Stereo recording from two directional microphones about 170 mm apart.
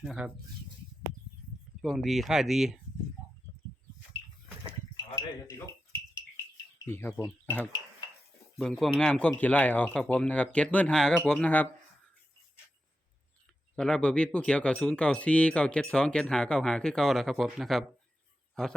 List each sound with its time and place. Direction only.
0.0 s speech: centre (ahead or behind)
1.8 s speech: centre (ahead or behind)
5.1 s speech: 15° left (ahead or behind)
13.7 s a man's voice: 5° left (ahead or behind)